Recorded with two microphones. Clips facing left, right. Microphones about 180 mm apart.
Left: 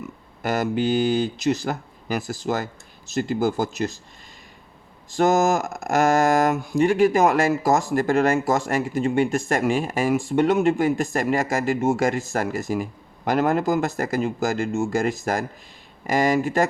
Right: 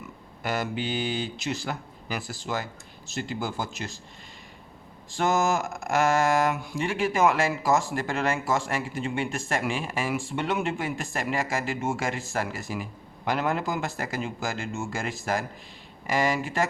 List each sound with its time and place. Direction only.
0.4 s speech: 45° left (ahead or behind)
5.1 s speech: 40° left (ahead or behind)